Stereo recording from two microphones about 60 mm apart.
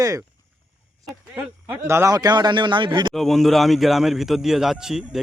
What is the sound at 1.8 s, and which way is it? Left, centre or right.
Speech, right.